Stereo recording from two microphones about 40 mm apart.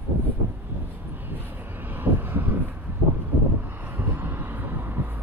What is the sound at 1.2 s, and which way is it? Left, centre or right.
Vehicle, right.